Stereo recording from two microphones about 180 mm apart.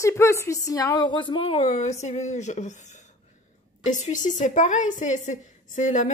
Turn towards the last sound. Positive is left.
turn(degrees=45)  # may be behind; listen again after turning